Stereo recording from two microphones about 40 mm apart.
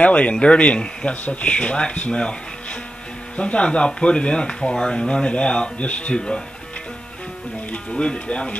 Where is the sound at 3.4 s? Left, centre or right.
Left.